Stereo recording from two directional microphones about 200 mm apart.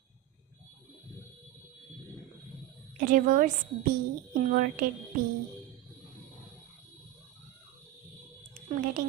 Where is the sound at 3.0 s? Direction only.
40° right (ahead or behind).